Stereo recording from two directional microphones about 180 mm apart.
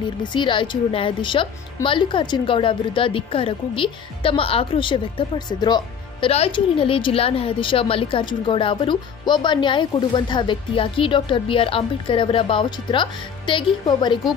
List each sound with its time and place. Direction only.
0.2 s a woman's voice: 25° left (ahead or behind)